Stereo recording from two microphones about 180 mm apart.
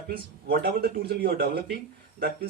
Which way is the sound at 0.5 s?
60° right (ahead or behind).